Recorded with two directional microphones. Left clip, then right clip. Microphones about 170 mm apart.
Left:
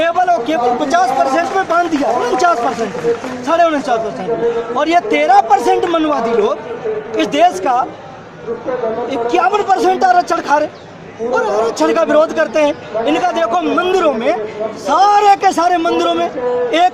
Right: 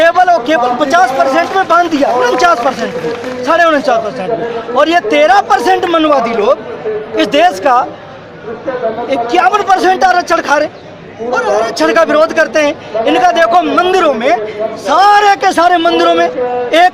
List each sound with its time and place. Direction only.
0.0 s a man's voice: 15° right (ahead or behind)
9.0 s a man's voice: 5° right (ahead or behind)